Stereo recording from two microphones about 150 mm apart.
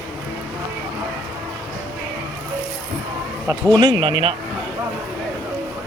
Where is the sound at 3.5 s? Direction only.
25° right (ahead or behind).